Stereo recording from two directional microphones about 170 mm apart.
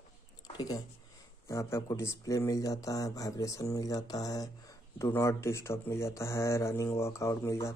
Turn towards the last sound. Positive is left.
turn(degrees=15)  # may be behind; listen again after turning